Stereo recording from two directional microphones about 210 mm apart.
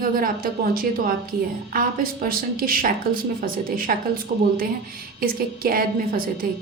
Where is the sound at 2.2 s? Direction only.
45° right (ahead or behind).